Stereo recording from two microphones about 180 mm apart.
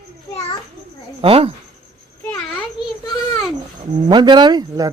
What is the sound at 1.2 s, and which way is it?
Speech, 30° right (ahead or behind).